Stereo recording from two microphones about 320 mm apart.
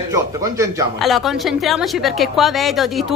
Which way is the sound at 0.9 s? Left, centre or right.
Centre.